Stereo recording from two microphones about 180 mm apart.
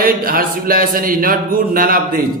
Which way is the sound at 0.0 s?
55° right (ahead or behind).